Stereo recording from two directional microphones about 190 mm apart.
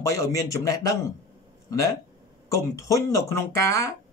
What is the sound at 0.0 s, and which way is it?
Speech, 15° left (ahead or behind).